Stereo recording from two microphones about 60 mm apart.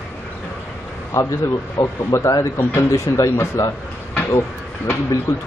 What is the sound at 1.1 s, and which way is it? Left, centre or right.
Speech, left.